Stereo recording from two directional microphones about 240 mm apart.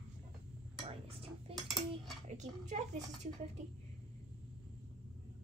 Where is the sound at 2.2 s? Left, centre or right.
Right.